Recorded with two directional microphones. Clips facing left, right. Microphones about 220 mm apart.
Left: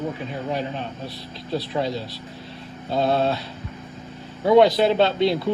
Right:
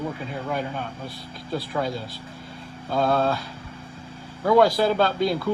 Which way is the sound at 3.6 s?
30° right (ahead or behind).